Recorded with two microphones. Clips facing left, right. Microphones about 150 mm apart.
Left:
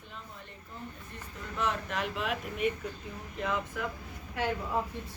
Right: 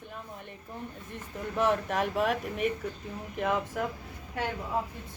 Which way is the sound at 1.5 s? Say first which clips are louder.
Right 6 dB; 50° right (ahead or behind).